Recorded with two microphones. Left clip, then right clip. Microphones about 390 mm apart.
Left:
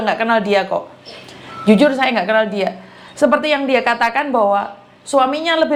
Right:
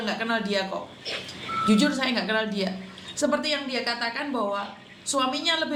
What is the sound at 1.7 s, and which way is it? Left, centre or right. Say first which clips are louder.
A woman's voice: left 12 dB; left.